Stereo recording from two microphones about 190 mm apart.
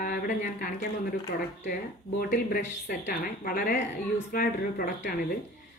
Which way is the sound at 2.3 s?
50° left (ahead or behind).